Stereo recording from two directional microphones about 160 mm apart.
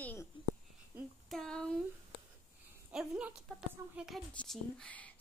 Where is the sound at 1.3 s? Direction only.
5° left (ahead or behind).